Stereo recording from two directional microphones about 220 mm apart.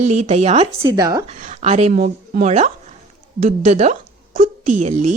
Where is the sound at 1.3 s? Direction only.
30° right (ahead or behind).